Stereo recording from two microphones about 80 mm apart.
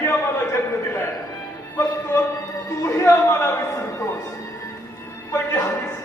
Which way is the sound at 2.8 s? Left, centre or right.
Left.